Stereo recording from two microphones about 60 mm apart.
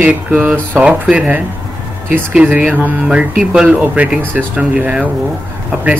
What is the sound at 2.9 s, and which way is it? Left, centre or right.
Speech, centre.